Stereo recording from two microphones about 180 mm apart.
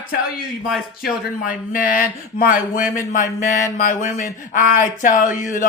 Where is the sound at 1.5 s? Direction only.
50° left (ahead or behind).